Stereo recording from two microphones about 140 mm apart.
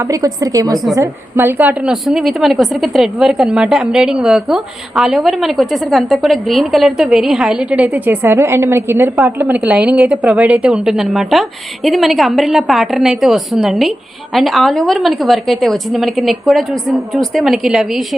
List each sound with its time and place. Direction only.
0.0 s a woman's voice: 25° right (ahead or behind); by 18.2 s centre (ahead or behind)